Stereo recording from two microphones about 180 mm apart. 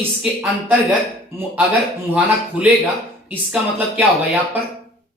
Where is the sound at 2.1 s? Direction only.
10° right (ahead or behind).